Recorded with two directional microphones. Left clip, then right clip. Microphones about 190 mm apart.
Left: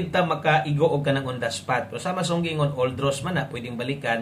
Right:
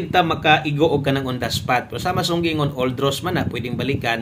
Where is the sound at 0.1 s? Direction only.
40° right (ahead or behind).